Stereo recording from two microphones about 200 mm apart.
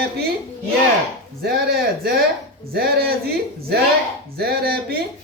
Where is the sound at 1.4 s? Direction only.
50° right (ahead or behind).